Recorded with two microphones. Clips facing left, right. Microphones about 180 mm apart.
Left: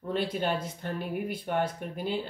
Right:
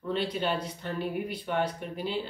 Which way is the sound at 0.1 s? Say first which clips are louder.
Even; 50° left (ahead or behind).